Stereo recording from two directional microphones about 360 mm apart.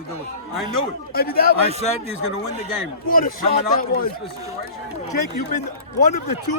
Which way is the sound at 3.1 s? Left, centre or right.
Left.